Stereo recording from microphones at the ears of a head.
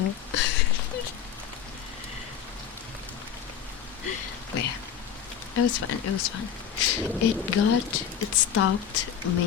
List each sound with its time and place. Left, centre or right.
0.0 s a sound: left
4.0 s rain: left
5.5 s speech: left